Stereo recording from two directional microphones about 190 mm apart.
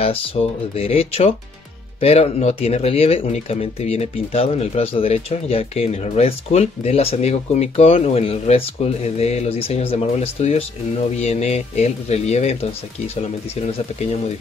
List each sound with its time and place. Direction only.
0.0 s speech: 30° left (ahead or behind)